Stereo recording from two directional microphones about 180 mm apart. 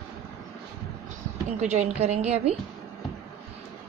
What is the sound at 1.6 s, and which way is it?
Speech, 40° right (ahead or behind).